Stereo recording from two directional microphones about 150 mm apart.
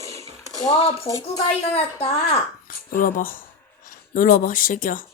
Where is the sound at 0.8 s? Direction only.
40° left (ahead or behind).